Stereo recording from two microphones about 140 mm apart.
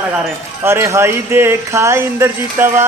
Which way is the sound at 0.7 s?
20° right (ahead or behind).